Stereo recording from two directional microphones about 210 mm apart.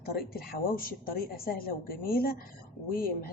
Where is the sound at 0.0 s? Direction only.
45° left (ahead or behind).